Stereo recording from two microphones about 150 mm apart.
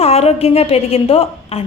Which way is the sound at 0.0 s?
45° left (ahead or behind).